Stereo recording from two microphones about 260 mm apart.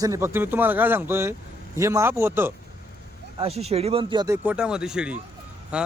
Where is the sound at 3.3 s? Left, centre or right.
Right.